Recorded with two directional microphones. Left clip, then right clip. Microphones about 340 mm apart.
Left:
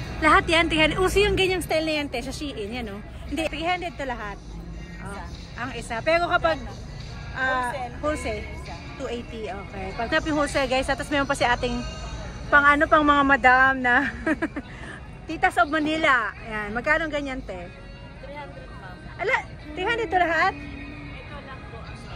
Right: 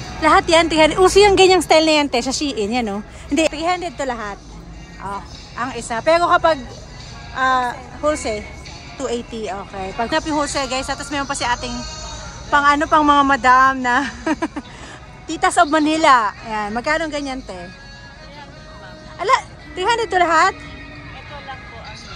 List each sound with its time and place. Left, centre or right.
0.2 s speech: centre
5.6 s speech: centre
11.7 s music: centre
12.4 s speech: centre
19.1 s speech: centre